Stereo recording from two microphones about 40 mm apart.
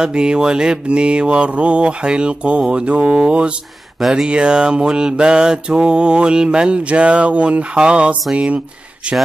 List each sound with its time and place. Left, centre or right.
0.0 s mantra: right
9.0 s speech: right